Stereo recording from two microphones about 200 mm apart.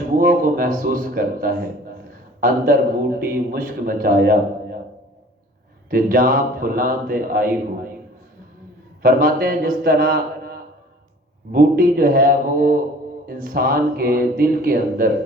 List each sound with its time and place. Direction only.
0.2 s a man's voice: 45° right (ahead or behind)
5.9 s a man's voice: 45° right (ahead or behind)
9.0 s a man's voice: 45° right (ahead or behind)